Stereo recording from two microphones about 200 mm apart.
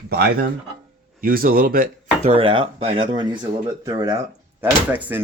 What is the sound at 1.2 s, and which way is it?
Speech, 45° right (ahead or behind).